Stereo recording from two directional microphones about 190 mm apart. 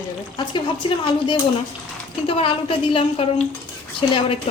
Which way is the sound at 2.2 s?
30° left (ahead or behind).